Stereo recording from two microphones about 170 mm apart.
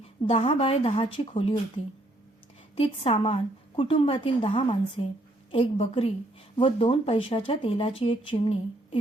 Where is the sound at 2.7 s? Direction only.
30° left (ahead or behind).